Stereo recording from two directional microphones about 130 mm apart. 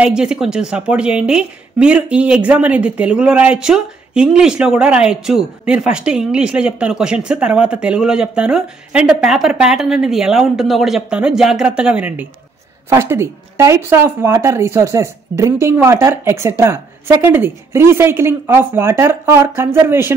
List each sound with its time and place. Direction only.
0.0 s a woman's voice: 5° right (ahead or behind)